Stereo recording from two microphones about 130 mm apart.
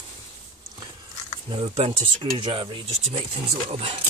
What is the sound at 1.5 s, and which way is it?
Speech, 45° right (ahead or behind).